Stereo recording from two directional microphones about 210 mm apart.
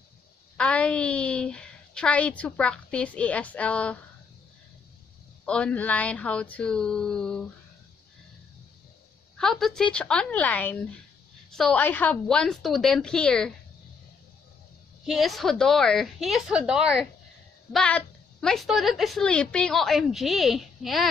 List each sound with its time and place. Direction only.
0.6 s a woman's voice: 5° left (ahead or behind)
5.4 s a woman's voice: 5° left (ahead or behind)
9.4 s a woman's voice: centre (ahead or behind)
15.0 s a woman's voice: centre (ahead or behind)